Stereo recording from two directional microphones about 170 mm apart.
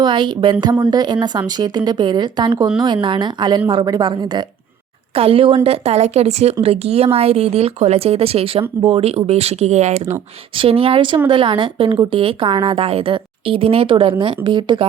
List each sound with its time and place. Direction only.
0.0 s a woman's voice: 30° right (ahead or behind)